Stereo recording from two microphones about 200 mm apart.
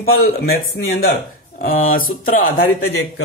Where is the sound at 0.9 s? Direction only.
50° left (ahead or behind).